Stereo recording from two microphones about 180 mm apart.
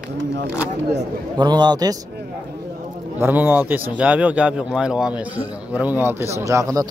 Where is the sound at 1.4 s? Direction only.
25° right (ahead or behind).